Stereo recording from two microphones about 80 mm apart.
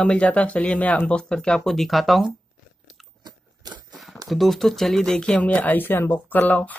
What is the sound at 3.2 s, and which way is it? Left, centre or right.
Crunch, right.